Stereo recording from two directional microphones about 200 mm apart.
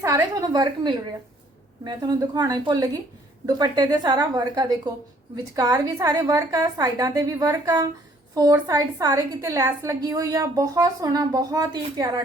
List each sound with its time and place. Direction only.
0.0 s a woman's voice: 15° right (ahead or behind)